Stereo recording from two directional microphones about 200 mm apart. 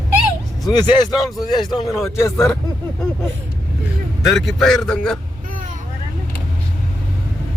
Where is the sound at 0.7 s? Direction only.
20° left (ahead or behind).